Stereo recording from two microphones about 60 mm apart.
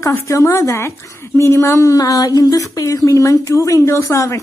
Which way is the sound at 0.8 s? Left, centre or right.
Left.